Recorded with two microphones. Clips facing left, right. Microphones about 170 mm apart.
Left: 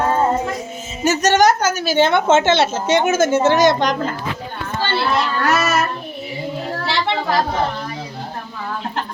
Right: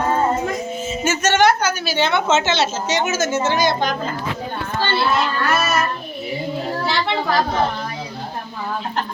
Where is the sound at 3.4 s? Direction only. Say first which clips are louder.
Left 5 dB; 75° left (ahead or behind).